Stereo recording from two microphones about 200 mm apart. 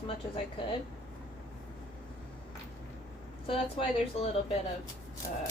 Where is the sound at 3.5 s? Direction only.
30° left (ahead or behind).